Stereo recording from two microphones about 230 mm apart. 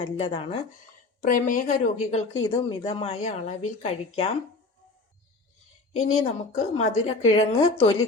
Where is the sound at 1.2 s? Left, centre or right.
Left.